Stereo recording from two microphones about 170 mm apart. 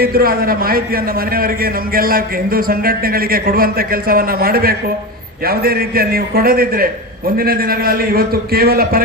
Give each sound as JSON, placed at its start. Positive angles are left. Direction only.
{"t": 0.0, "sound": "a man's voice", "side_deg": -60}